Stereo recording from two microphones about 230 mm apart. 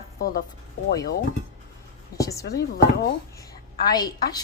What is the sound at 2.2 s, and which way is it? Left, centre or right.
Speech, centre.